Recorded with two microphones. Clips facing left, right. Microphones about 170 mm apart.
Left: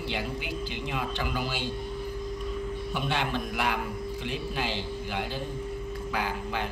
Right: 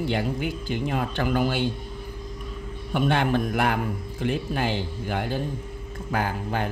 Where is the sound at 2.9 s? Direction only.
50° right (ahead or behind).